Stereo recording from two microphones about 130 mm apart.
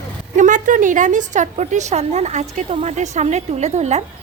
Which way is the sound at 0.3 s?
80° right.